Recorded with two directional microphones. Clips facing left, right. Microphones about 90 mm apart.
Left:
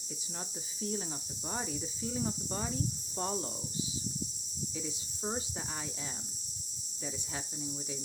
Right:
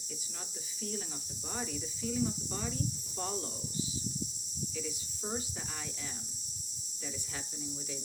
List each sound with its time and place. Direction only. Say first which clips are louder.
0.8 s speech: left 3 dB; 25° left (ahead or behind)
4.7 s speech: even; 20° left (ahead or behind)
7.0 s speech: left 2 dB; 20° left (ahead or behind)